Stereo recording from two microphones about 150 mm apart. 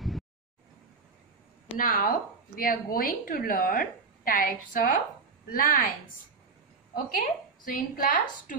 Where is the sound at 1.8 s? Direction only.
70° left (ahead or behind).